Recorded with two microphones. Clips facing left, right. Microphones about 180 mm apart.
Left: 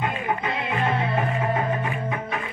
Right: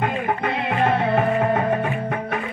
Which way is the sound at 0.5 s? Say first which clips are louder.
Right 6 dB; 60° right (ahead or behind).